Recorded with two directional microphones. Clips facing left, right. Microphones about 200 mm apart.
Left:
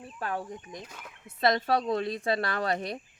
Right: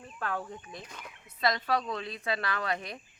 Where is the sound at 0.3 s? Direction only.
20° left (ahead or behind).